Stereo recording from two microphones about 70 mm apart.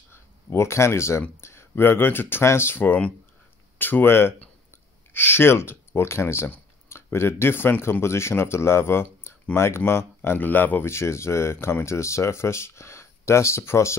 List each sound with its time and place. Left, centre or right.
0.1 s speech: left
10.9 s speech: left